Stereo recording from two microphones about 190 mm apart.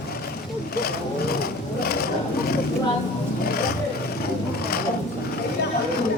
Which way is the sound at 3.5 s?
55° left (ahead or behind).